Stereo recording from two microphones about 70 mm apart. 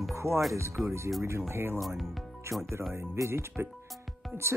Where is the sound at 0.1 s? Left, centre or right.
Right.